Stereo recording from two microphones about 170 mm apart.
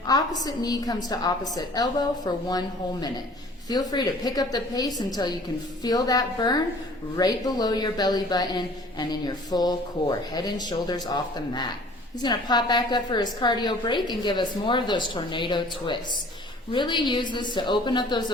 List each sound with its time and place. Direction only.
0.1 s a woman's voice: 20° left (ahead or behind)